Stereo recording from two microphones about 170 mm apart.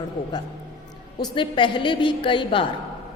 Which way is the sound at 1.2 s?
25° left (ahead or behind).